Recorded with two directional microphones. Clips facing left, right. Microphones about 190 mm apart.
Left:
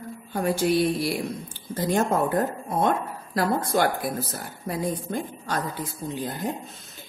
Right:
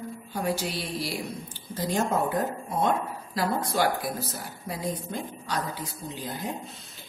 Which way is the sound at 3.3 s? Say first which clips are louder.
Left 4 dB; 55° left (ahead or behind).